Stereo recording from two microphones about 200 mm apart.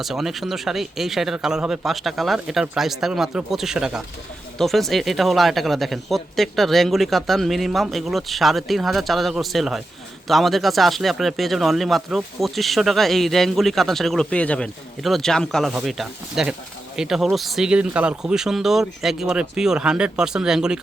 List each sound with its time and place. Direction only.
0.0 s speech: centre (ahead or behind)